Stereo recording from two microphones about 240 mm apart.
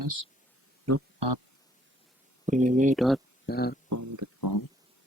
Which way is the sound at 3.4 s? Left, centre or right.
Left.